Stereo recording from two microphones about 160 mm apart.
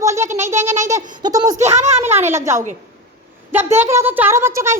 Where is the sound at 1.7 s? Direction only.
45° right (ahead or behind).